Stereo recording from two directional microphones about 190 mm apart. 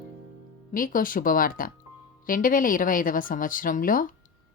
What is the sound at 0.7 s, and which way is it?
Speech, 45° left (ahead or behind).